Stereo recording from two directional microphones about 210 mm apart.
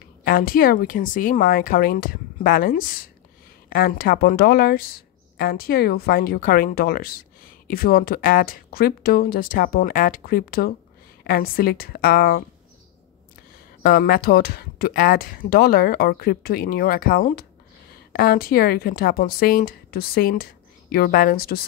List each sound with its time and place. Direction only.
0.2 s a woman's voice: 45° left (ahead or behind)
13.8 s speech: 45° left (ahead or behind)